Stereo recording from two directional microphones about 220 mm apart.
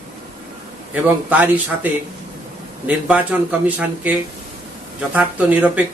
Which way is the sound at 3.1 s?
5° right (ahead or behind).